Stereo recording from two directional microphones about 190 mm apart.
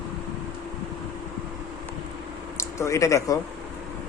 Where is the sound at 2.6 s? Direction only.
15° left (ahead or behind).